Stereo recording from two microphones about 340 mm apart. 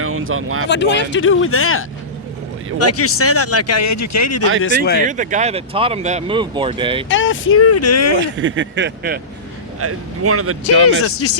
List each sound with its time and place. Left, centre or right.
0.0 s a sound: right
0.7 s speech: left
5.0 s speech: right
7.1 s speech: left
8.4 s speech: right
9.8 s speech: right
11.0 s speech: left